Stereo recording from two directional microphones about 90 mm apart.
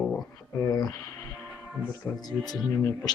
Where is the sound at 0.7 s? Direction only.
45° left (ahead or behind).